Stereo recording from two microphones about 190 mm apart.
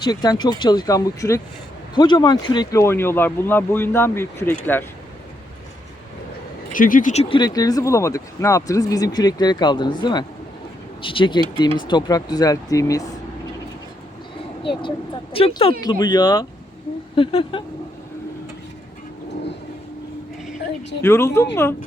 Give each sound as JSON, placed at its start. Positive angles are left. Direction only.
{"t": 0.0, "sound": "speech", "side_deg": 20}
{"t": 6.7, "sound": "speech", "side_deg": 45}
{"t": 14.6, "sound": "speech", "side_deg": 25}
{"t": 21.0, "sound": "speech", "side_deg": 15}